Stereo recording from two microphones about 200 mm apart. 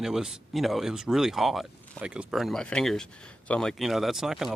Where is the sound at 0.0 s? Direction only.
Centre (ahead or behind).